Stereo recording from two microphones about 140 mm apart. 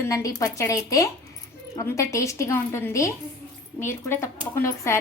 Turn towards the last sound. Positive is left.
turn(degrees=20)  # may be behind; listen again after turning